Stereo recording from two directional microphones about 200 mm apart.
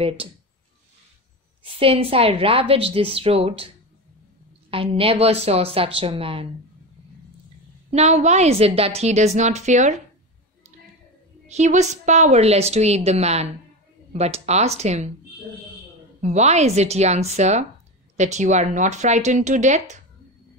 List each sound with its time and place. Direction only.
1.6 s a woman's voice: 25° right (ahead or behind)
7.9 s a woman's voice: 35° right (ahead or behind)
11.4 s a woman's voice: 35° right (ahead or behind)
16.2 s a woman's voice: 35° right (ahead or behind)